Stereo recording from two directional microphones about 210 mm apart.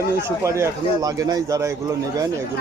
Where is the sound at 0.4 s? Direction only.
15° right (ahead or behind).